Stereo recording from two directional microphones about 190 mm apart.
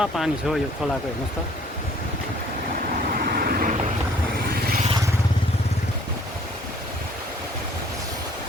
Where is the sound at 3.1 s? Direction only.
50° right (ahead or behind).